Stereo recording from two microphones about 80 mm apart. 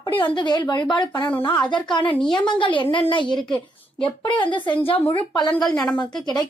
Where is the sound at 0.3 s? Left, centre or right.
Left.